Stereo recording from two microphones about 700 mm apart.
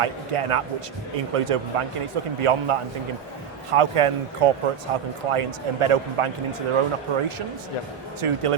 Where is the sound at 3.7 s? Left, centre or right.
Right.